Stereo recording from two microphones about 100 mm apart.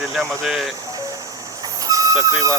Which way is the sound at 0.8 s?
35° right (ahead or behind).